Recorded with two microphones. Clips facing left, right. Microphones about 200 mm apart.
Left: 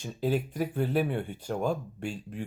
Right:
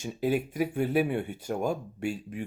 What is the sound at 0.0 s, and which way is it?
Speech, 10° right (ahead or behind).